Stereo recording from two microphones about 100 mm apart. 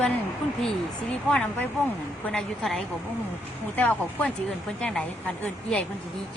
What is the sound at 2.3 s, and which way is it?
Speech, 5° left (ahead or behind).